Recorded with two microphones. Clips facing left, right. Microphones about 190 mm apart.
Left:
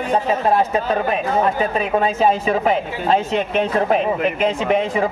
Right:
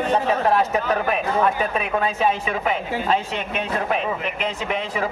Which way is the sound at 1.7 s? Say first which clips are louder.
Left 4 dB; 35° left (ahead or behind).